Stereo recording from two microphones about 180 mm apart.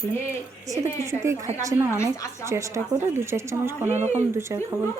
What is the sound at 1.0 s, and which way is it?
Speech, 15° right (ahead or behind).